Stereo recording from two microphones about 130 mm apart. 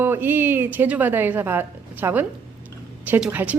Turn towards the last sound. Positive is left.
turn(degrees=-10)  # may be behind; listen again after turning